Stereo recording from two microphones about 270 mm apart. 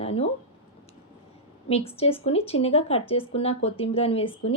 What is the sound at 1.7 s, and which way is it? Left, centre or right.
Speech, left.